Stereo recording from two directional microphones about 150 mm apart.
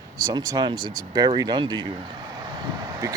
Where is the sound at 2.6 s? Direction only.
20° right (ahead or behind).